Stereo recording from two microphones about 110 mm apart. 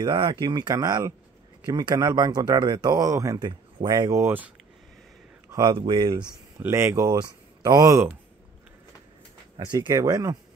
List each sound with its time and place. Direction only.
0.0 s speech: 40° right (ahead or behind); by 4.5 s 20° right (ahead or behind)
5.5 s speech: 35° right (ahead or behind)
6.6 s speech: 25° right (ahead or behind)
9.6 s speech: 35° right (ahead or behind)